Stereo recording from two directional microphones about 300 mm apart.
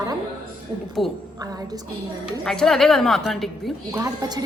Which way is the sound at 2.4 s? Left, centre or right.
Centre.